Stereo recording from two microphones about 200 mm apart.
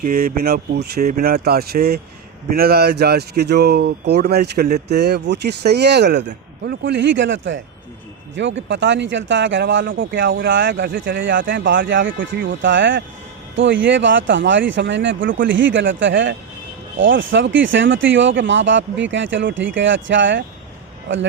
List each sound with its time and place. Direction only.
0.0 s speech: 45° right (ahead or behind); by 20.4 s 65° right (ahead or behind)